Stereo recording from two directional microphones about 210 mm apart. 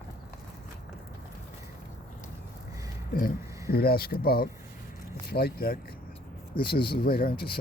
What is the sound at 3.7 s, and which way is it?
Speech, 45° left (ahead or behind).